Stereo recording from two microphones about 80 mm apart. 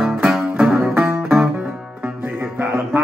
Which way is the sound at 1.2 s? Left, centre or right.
Centre.